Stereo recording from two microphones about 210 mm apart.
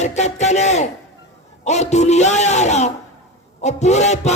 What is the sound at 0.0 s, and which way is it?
A man's voice, 35° left (ahead or behind).